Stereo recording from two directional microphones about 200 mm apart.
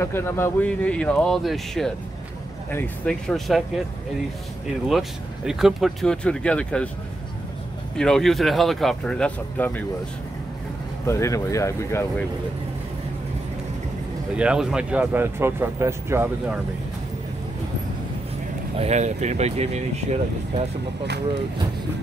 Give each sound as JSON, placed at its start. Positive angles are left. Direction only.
{"t": 0.0, "sound": "speech", "side_deg": 10}
{"t": 4.8, "sound": "speech", "side_deg": 0}
{"t": 8.0, "sound": "speech", "side_deg": 0}
{"t": 11.1, "sound": "speech", "side_deg": 15}
{"t": 14.3, "sound": "speech", "side_deg": -5}
{"t": 18.8, "sound": "speech", "side_deg": -35}